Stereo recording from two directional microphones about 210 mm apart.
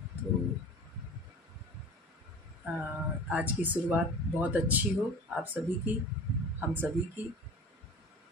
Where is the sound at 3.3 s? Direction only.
10° right (ahead or behind).